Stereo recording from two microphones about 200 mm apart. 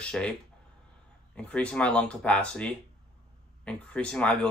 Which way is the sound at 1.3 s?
5° left (ahead or behind).